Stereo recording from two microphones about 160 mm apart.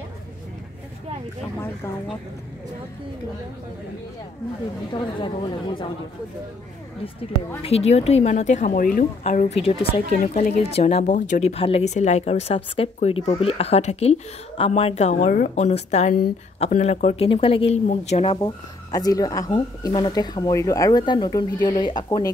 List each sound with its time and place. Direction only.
5.0 s speech: 30° left (ahead or behind)
7.2 s a woman's voice: 40° left (ahead or behind)
18.4 s speech: 25° left (ahead or behind)